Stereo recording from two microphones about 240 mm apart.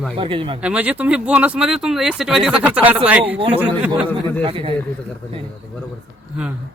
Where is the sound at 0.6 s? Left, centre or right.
Centre.